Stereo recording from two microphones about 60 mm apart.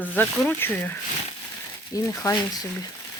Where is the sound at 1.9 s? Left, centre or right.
Left.